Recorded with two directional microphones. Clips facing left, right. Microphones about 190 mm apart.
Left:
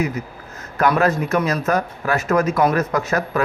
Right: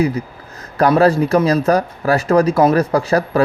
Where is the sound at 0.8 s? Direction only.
35° right (ahead or behind).